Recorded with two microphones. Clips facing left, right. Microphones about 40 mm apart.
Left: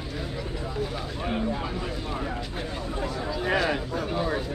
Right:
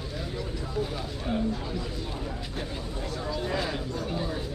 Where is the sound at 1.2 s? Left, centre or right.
Left.